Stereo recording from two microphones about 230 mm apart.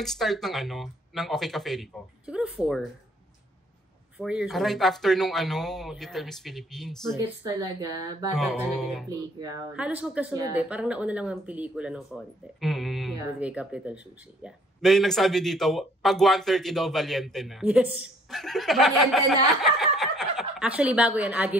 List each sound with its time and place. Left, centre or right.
0.0 s speech: centre
4.2 s speech: centre
7.2 s speech: centre
8.4 s speech: centre